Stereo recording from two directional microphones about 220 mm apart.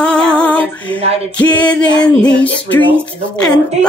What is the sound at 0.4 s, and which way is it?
Female singing, 5° left (ahead or behind).